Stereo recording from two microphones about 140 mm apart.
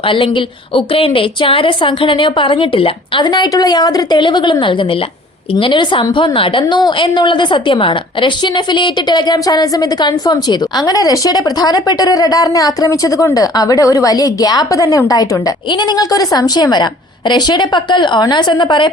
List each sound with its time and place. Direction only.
0.1 s a woman's voice: 40° left (ahead or behind)